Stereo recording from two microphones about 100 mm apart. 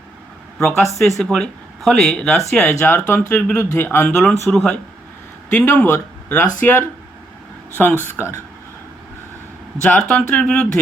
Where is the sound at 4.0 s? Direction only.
10° left (ahead or behind).